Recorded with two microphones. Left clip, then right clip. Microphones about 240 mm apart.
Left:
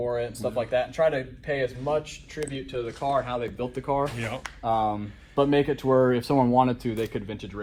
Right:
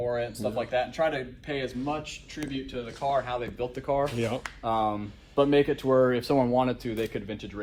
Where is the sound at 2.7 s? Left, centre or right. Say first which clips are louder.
Left 2 dB; left.